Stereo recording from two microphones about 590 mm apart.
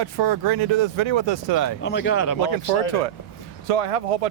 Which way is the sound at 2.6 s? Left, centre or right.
Left.